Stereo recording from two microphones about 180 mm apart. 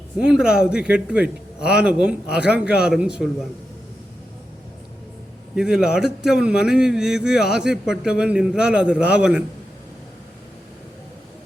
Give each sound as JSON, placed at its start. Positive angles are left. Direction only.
{"t": 0.2, "sound": "a man's voice", "side_deg": -5}
{"t": 5.5, "sound": "a man's voice", "side_deg": -5}